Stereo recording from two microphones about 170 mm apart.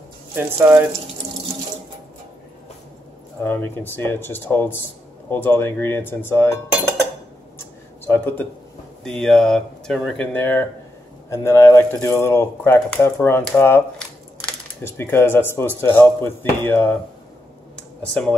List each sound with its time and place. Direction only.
0.4 s speech: 15° right (ahead or behind)
3.4 s speech: 10° left (ahead or behind)
8.1 s speech: 10° left (ahead or behind)